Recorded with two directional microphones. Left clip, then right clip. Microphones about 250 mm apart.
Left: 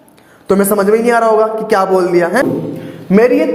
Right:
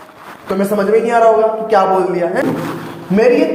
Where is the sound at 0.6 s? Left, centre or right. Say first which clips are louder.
Left 1 dB; left.